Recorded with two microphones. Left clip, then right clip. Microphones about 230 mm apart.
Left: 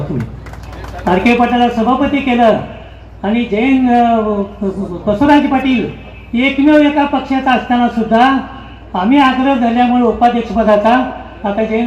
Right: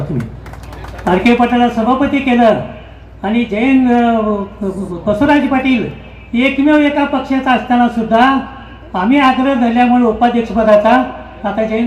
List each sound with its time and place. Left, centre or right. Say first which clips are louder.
1.0 s a man's voice: even; right